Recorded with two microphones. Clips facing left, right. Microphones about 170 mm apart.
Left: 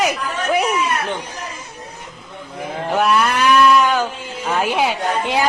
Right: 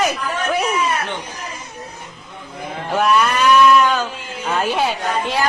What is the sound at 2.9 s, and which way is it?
Speech, 10° left (ahead or behind).